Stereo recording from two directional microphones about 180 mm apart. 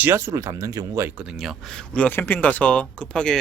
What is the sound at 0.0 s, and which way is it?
Speech, 15° right (ahead or behind).